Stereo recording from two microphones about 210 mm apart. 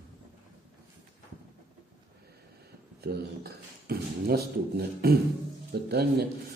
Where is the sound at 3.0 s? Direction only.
50° right (ahead or behind).